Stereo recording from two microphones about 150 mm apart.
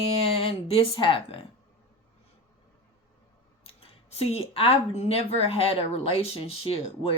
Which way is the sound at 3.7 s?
40° left (ahead or behind).